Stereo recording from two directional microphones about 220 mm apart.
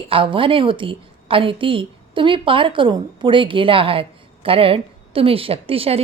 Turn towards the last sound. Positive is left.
turn(degrees=-25)  # may be behind; listen again after turning